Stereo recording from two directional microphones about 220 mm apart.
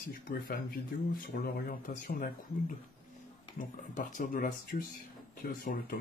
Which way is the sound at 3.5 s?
35° left (ahead or behind).